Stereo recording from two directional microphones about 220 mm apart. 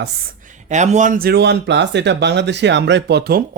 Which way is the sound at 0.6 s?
30° right (ahead or behind).